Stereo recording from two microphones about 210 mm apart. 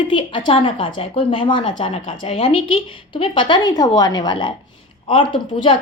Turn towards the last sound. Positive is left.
turn(degrees=25)  # may be behind; listen again after turning